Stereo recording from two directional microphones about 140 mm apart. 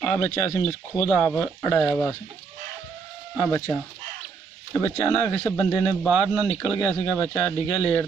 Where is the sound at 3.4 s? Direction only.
15° left (ahead or behind).